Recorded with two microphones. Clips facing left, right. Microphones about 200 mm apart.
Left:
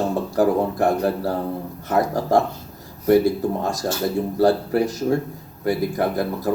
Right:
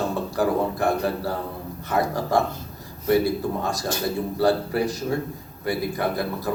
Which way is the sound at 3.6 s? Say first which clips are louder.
Left 3 dB; 45° left (ahead or behind).